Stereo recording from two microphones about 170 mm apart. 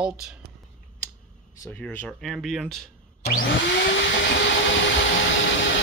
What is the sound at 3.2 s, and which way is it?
Vacuum cleaner, 65° left (ahead or behind).